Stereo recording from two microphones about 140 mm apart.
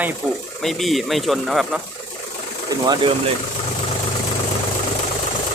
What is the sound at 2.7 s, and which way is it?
Speech, 30° right (ahead or behind).